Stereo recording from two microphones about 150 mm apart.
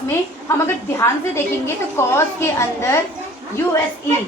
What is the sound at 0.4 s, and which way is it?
A woman's voice, 20° left (ahead or behind).